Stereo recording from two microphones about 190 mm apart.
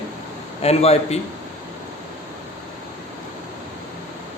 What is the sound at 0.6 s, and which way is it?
Speech, 35° left (ahead or behind).